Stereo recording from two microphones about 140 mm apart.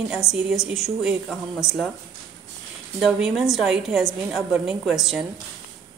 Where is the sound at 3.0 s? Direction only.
Centre (ahead or behind).